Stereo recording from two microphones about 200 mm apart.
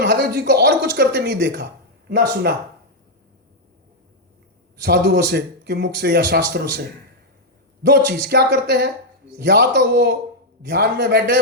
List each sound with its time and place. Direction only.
0.0 s a man's voice: 55° right (ahead or behind)
4.8 s a man's voice: 55° right (ahead or behind)
7.9 s a man's voice: 55° right (ahead or behind)